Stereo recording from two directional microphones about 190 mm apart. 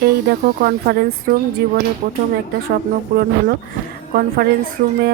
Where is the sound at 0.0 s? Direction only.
55° right (ahead or behind).